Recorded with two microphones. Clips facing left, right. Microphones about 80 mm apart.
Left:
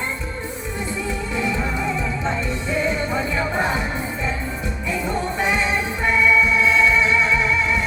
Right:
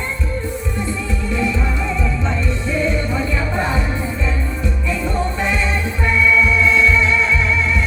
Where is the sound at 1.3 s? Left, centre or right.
Centre.